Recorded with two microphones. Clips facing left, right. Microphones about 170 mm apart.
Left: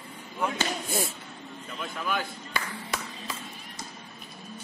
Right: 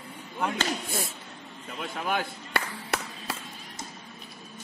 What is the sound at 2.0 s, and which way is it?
Clapping, 65° right (ahead or behind).